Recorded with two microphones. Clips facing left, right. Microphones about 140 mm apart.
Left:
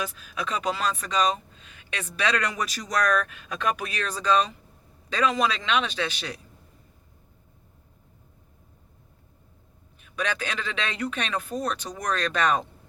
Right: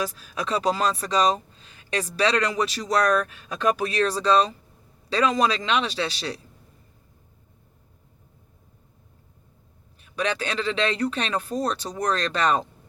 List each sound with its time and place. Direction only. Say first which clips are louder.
0.0 s speech: right 3 dB; 35° right (ahead or behind)
10.0 s speech: right 3 dB; 35° right (ahead or behind)